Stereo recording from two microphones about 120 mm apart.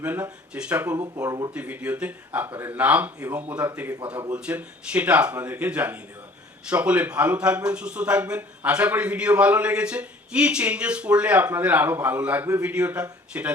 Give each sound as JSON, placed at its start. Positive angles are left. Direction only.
{"t": 0.0, "sound": "a man's voice", "side_deg": -15}
{"t": 0.9, "sound": "speech", "side_deg": -30}
{"t": 1.5, "sound": "a man's voice", "side_deg": -10}